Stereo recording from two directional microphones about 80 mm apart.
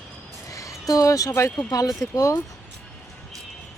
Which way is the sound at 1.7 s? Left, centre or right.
Left.